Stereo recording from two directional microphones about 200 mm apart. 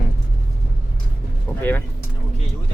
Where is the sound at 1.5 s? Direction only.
10° left (ahead or behind).